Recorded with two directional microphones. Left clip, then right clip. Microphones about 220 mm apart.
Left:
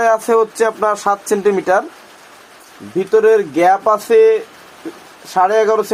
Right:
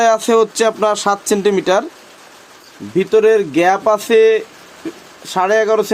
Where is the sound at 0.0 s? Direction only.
75° right (ahead or behind).